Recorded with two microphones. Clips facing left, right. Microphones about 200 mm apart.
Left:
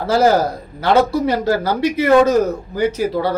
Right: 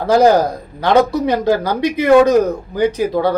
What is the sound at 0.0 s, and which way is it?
Speech, 15° right (ahead or behind).